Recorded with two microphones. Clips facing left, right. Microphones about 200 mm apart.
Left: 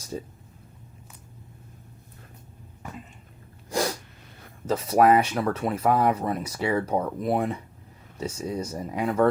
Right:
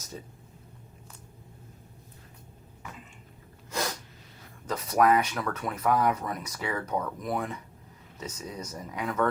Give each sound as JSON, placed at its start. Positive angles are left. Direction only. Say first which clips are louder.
{"t": 3.7, "sound": "sneeze", "louder": "left 6 dB", "side_deg": 30}
{"t": 4.6, "sound": "speech", "louder": "left 4 dB", "side_deg": 25}